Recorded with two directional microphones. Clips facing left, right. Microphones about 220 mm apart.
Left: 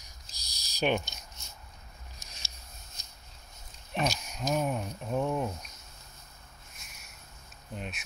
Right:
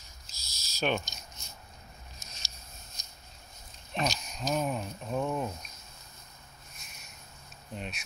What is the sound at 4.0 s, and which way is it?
Speech, 10° left (ahead or behind).